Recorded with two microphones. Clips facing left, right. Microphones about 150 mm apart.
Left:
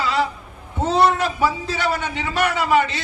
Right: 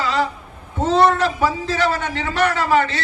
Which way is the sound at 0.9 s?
10° left (ahead or behind).